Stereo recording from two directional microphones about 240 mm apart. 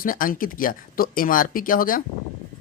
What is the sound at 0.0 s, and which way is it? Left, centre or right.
Speech, left.